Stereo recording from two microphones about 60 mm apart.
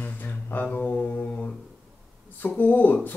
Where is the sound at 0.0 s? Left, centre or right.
Left.